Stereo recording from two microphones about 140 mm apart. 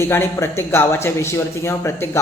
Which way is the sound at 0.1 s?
20° left (ahead or behind).